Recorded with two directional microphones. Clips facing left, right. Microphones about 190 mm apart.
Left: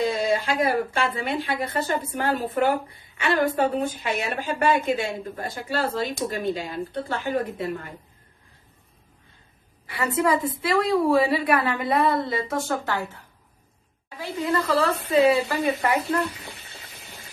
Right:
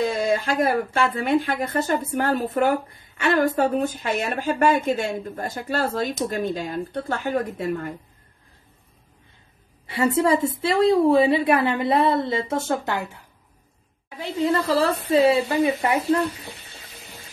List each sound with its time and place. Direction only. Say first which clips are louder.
0.4 s a woman's voice: right 1 dB; 50° right (ahead or behind)
9.8 s a woman's voice: right 3 dB; 25° right (ahead or behind)